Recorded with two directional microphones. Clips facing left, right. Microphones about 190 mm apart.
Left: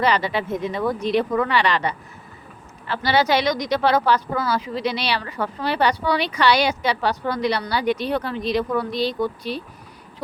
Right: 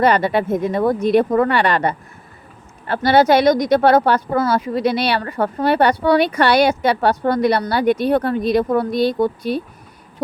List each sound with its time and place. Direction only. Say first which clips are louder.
0.0 s speech: right 6 dB; 50° right (ahead or behind)